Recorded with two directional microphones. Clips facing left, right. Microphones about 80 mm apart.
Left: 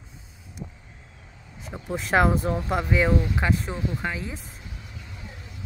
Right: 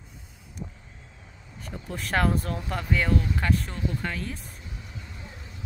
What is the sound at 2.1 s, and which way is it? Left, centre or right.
Speech, centre.